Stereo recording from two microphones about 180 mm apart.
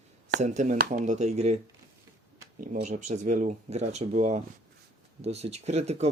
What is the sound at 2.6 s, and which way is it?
Speech, 50° right (ahead or behind).